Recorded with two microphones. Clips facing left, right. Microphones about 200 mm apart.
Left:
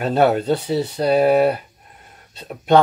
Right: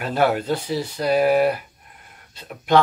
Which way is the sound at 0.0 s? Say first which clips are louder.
Left 4 dB; 25° left (ahead or behind).